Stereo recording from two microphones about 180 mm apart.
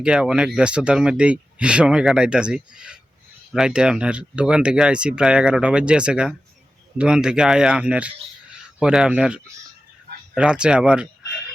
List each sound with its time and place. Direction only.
0.0 s speech: 5° right (ahead or behind)